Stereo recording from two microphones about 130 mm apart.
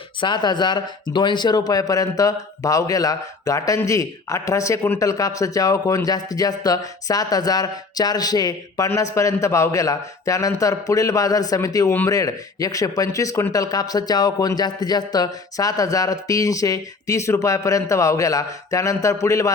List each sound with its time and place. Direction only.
0.2 s speech: 35° left (ahead or behind)